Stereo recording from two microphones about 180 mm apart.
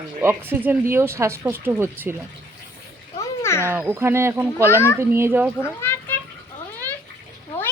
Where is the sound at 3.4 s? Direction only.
15° left (ahead or behind).